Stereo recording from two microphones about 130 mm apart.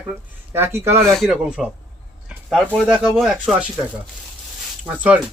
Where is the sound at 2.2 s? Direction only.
Centre (ahead or behind).